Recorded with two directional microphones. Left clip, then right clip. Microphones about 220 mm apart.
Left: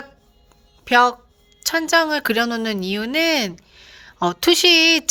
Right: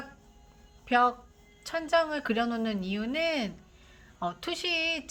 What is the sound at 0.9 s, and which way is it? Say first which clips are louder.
Speech: left 10 dB; 40° left (ahead or behind).